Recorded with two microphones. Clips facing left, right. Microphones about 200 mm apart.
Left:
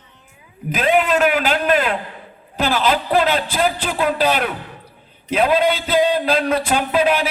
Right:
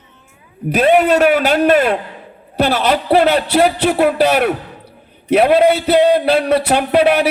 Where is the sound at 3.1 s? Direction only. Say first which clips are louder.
Right 6 dB; 70° right (ahead or behind).